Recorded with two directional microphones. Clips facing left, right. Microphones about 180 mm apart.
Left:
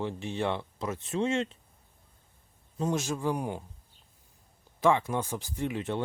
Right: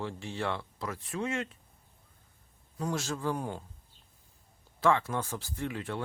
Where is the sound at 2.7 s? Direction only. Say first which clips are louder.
Left 4 dB; 20° left (ahead or behind).